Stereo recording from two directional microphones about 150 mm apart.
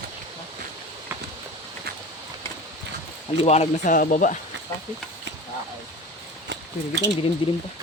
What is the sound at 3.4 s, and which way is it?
Speech, 45° left (ahead or behind).